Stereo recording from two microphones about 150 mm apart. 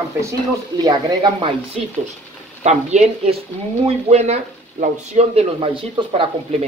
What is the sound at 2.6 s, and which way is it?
Speech, 50° right (ahead or behind).